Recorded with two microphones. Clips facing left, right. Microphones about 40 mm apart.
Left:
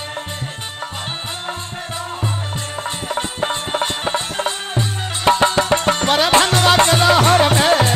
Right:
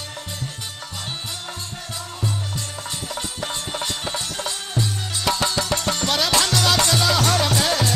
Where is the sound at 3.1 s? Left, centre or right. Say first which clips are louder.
Left 9 dB; left.